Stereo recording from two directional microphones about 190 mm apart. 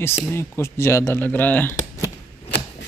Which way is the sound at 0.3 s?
15° left (ahead or behind).